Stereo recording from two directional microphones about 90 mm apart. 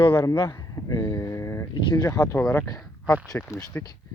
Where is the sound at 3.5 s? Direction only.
35° left (ahead or behind).